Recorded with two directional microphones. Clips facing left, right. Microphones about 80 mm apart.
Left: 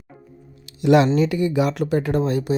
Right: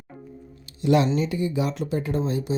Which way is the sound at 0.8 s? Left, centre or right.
Left.